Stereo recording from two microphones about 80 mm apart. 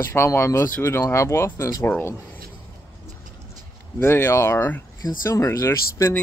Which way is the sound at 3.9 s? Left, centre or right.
Left.